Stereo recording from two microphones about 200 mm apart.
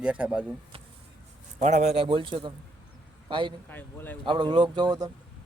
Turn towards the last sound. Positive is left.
turn(degrees=-20)  # may be behind; listen again after turning